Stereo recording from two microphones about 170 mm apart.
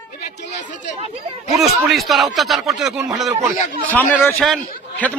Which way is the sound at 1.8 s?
Centre (ahead or behind).